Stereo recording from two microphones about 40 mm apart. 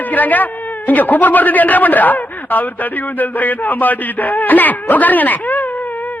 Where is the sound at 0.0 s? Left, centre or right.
Left.